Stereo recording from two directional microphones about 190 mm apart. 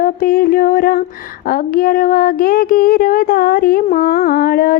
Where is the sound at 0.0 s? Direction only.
50° left (ahead or behind).